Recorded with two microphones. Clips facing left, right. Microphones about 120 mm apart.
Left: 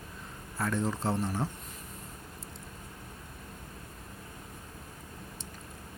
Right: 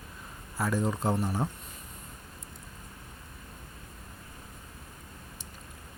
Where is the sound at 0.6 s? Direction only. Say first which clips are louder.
Right 2 dB; 5° right (ahead or behind).